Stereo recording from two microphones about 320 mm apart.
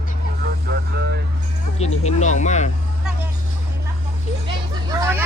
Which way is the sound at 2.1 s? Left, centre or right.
Left.